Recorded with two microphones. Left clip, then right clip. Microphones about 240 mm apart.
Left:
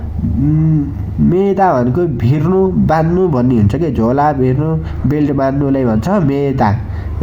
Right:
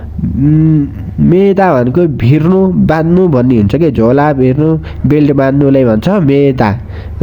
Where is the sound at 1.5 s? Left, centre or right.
Right.